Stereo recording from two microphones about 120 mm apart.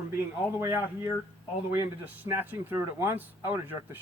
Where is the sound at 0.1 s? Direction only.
20° right (ahead or behind).